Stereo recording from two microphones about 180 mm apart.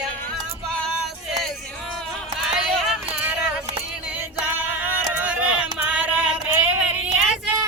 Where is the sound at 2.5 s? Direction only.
Centre (ahead or behind).